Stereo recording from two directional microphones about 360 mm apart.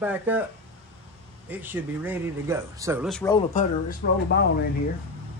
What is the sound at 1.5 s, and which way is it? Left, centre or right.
Speech, centre.